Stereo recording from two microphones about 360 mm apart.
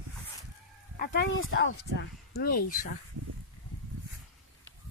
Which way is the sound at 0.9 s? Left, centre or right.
Left.